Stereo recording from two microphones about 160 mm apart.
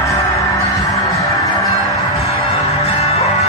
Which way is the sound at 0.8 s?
20° left (ahead or behind).